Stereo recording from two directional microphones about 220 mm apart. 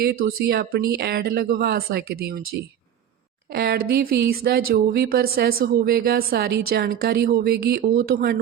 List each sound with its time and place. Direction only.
0.0 s speech: 45° right (ahead or behind)